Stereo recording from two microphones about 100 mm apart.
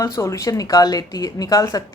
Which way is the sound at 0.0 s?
30° left (ahead or behind).